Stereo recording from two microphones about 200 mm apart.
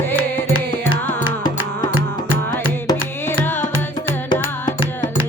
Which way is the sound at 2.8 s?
10° left (ahead or behind).